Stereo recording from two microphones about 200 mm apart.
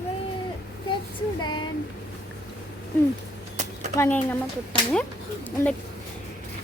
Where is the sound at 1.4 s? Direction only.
20° left (ahead or behind).